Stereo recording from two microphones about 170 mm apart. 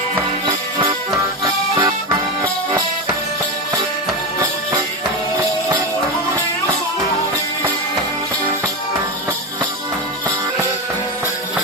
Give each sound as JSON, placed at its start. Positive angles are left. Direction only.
{"t": 0.4, "sound": "music", "side_deg": -20}